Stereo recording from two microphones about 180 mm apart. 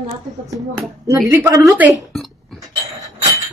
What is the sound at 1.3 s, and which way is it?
Speech, 15° right (ahead or behind).